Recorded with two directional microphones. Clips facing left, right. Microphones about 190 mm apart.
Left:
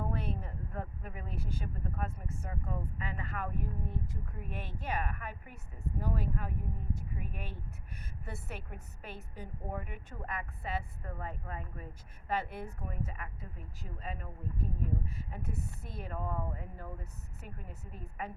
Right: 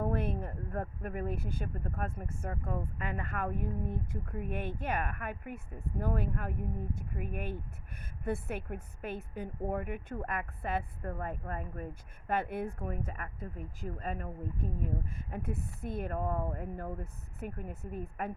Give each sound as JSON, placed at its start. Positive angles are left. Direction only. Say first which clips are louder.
{"t": 0.0, "sound": "a woman's voice", "louder": "right 5 dB", "side_deg": -50}